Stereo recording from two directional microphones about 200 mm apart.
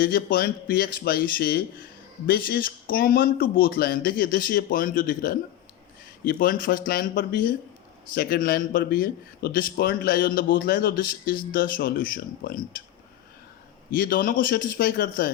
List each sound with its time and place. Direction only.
0.0 s a man's voice: 45° left (ahead or behind)
14.0 s a man's voice: 45° left (ahead or behind)